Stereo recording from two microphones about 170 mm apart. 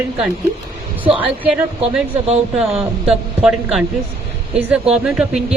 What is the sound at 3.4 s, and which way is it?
Speech, 5° right (ahead or behind).